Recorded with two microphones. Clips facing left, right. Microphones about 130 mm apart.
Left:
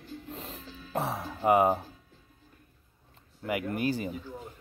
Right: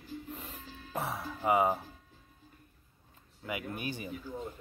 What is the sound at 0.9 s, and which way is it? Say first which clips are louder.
Music: left 4 dB; 25° left (ahead or behind).